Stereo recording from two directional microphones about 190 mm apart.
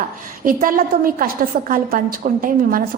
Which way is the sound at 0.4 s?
50° right (ahead or behind).